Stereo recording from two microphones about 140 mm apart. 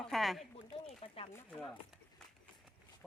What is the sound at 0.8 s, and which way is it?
Speech, 45° left (ahead or behind).